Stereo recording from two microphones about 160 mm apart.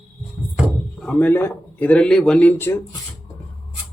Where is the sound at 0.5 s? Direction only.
Centre (ahead or behind).